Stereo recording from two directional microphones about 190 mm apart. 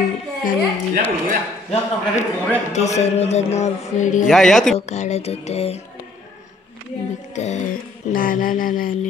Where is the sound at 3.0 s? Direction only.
35° left (ahead or behind).